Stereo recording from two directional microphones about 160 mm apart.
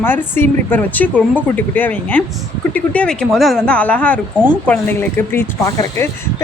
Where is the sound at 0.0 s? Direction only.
15° left (ahead or behind).